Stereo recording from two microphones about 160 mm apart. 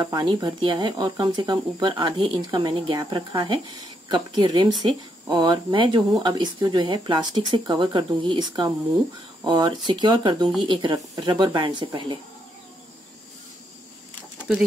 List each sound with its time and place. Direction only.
0.0 s speech: 25° right (ahead or behind)